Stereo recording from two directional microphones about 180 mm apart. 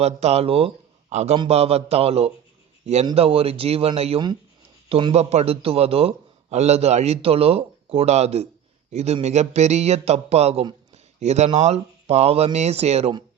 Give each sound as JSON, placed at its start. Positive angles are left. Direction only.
{"t": 0.0, "sound": "speech", "side_deg": -35}